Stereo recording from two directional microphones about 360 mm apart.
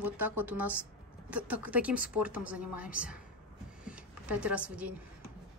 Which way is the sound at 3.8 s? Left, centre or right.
Centre.